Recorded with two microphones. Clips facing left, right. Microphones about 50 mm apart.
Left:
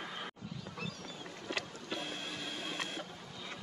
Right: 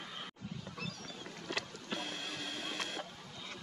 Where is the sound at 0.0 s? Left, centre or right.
Centre.